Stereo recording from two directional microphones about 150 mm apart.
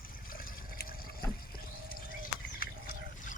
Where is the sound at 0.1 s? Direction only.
70° left (ahead or behind).